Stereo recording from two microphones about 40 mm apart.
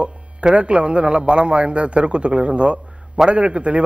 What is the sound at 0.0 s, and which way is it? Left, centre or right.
A man's voice, right.